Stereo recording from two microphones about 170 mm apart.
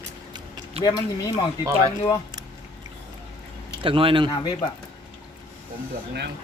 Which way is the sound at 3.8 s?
30° right (ahead or behind).